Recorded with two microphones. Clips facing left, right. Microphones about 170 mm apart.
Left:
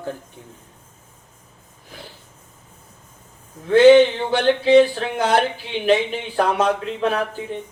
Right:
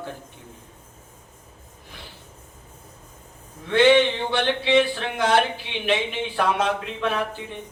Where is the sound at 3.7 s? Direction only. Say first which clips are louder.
Left 6 dB; 40° left (ahead or behind).